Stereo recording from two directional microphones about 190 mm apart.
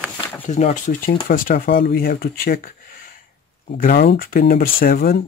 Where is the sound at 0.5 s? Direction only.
40° left (ahead or behind).